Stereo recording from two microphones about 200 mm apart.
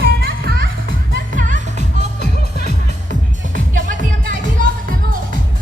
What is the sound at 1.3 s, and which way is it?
Music, 40° right (ahead or behind).